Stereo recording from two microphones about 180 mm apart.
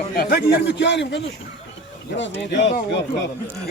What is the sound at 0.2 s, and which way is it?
A man's voice, 60° left (ahead or behind).